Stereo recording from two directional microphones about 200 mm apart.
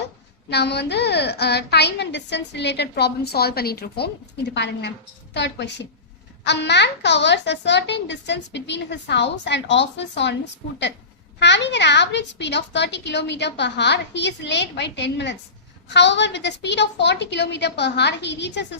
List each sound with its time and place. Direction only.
0.5 s a child's voice: 55° left (ahead or behind)